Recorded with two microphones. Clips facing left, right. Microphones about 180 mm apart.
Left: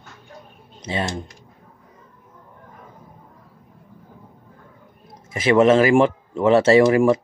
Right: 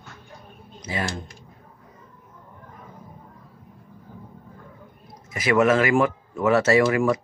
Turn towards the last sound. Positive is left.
turn(degrees=25)  # may be behind; listen again after turning